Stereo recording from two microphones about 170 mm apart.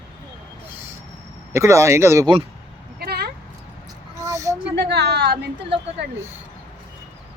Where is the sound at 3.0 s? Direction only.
65° right (ahead or behind).